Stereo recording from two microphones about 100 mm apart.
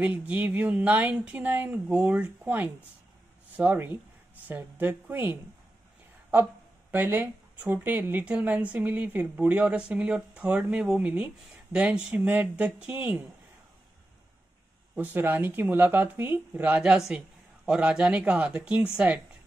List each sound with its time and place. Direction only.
0.0 s speech: 15° right (ahead or behind)
6.9 s speech: 20° right (ahead or behind)
15.0 s speech: 20° right (ahead or behind)